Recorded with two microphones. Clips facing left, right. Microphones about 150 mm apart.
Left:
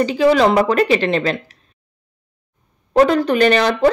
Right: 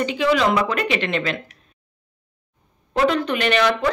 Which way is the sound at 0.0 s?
35° left (ahead or behind).